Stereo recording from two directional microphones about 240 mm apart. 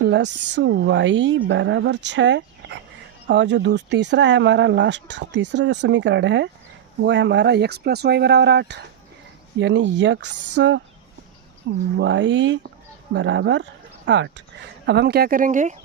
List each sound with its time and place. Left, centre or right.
0.0 s speech: right
11.9 s speech: right